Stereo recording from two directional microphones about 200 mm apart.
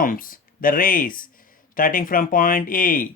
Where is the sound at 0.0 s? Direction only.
45° left (ahead or behind).